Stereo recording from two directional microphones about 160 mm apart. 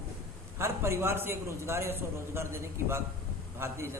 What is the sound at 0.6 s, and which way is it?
A man's voice, 15° right (ahead or behind).